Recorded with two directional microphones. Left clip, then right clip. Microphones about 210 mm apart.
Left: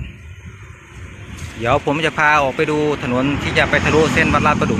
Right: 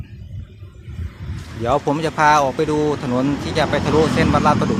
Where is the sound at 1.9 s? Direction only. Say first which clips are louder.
Right 2 dB; centre (ahead or behind).